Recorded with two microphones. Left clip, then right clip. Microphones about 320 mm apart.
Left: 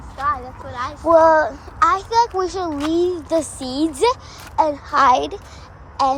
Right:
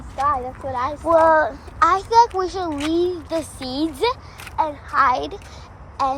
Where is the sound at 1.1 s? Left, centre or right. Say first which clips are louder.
Left 2 dB; centre.